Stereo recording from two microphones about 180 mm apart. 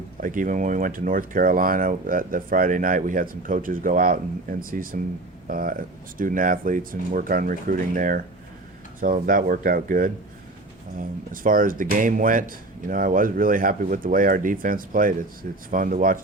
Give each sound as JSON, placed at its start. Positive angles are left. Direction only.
{"t": 0.2, "sound": "speech", "side_deg": -45}